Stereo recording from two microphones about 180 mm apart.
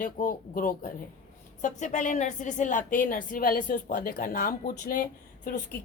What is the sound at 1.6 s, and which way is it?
A woman's voice, 40° left (ahead or behind).